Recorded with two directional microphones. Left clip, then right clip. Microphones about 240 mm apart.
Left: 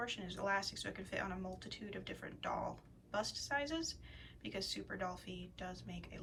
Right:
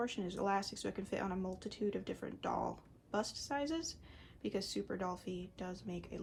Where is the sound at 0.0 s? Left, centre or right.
Right.